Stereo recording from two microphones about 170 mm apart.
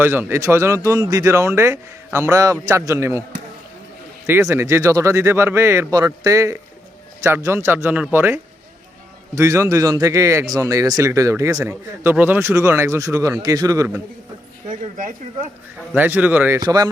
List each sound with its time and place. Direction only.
0.0 s speech: 10° right (ahead or behind)
4.3 s a man's voice: 15° right (ahead or behind)
16.0 s speech: 10° right (ahead or behind)
16.6 s a man's voice: 20° right (ahead or behind)